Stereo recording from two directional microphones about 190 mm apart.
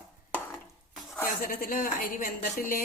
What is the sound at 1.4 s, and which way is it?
Speech, 45° left (ahead or behind).